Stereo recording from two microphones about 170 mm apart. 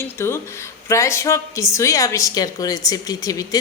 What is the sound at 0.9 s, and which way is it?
A woman's voice, 15° left (ahead or behind).